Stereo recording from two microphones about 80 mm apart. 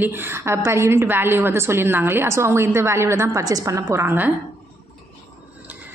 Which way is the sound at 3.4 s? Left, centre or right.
Right.